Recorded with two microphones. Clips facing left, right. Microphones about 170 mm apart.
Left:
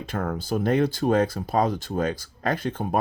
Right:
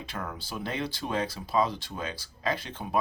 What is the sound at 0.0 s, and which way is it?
Speech, 50° left (ahead or behind).